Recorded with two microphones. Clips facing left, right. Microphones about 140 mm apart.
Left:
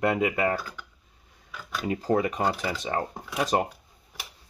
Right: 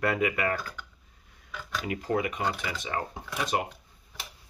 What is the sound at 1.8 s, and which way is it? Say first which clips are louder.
Speech: left 5 dB; 35° left (ahead or behind).